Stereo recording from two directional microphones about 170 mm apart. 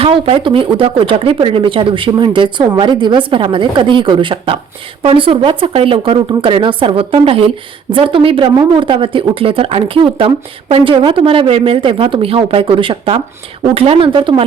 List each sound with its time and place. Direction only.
0.0 s a woman's voice: 35° right (ahead or behind)